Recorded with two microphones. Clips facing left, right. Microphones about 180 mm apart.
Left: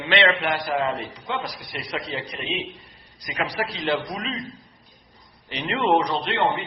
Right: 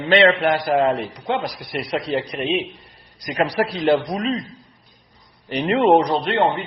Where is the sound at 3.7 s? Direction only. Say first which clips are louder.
Right 8 dB; 50° right (ahead or behind).